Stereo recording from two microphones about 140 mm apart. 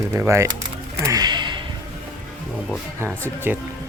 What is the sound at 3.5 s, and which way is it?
Speech, 15° right (ahead or behind).